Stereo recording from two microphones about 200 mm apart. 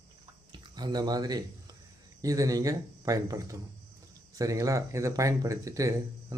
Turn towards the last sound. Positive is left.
turn(degrees=-15)  # may be behind; listen again after turning